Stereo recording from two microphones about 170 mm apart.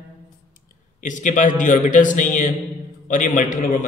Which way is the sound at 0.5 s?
50° left (ahead or behind).